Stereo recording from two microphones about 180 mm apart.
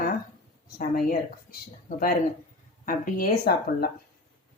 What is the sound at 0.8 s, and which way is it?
Speech, 55° left (ahead or behind).